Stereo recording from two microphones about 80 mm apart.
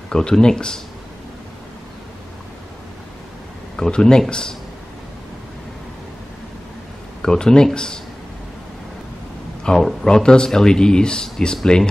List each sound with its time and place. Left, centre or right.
0.1 s speech: centre
3.7 s speech: centre
7.2 s speech: centre
9.6 s speech: centre